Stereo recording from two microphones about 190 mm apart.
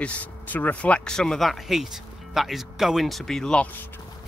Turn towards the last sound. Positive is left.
turn(degrees=5)  # may be behind; listen again after turning